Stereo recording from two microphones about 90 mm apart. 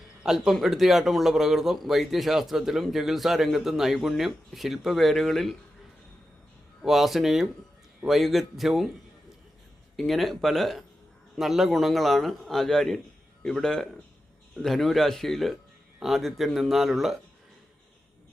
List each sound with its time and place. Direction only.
0.2 s a man's voice: 5° right (ahead or behind)
6.8 s a man's voice: centre (ahead or behind)
10.0 s a man's voice: centre (ahead or behind)